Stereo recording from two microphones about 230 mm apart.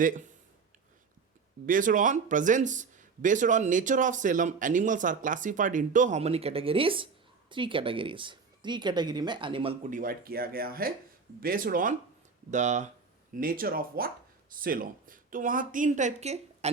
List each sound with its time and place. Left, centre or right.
0.0 s speech: right
1.6 s speech: right